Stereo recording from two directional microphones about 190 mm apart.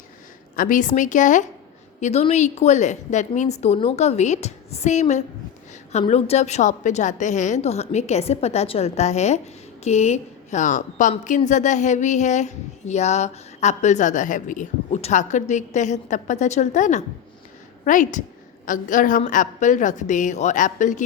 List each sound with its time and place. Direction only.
0.5 s speech: 45° left (ahead or behind)